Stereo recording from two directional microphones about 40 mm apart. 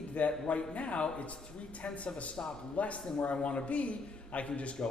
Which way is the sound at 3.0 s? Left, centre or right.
Left.